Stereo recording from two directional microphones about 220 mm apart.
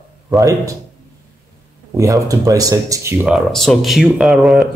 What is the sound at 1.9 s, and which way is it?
Speech, 15° right (ahead or behind).